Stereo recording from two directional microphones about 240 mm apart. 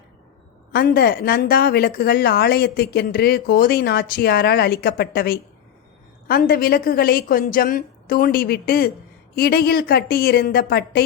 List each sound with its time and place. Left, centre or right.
0.7 s speech: left